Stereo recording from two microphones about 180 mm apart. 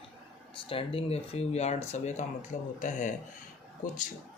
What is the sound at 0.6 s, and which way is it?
Speech, 30° left (ahead or behind).